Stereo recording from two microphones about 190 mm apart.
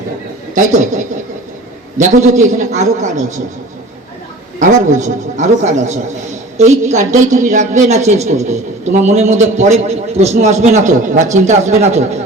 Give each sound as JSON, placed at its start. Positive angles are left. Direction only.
{"t": 0.5, "sound": "a man's voice", "side_deg": -40}
{"t": 4.6, "sound": "a man's voice", "side_deg": -40}